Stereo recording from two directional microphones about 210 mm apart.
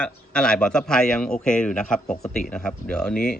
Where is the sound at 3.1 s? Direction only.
45° left (ahead or behind).